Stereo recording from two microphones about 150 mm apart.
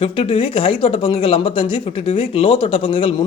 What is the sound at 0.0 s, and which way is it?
Speech, 40° left (ahead or behind).